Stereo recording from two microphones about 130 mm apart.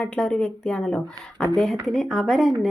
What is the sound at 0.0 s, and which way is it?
Speech, 5° left (ahead or behind).